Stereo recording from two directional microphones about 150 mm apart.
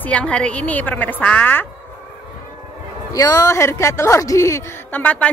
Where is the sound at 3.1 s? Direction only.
25° left (ahead or behind).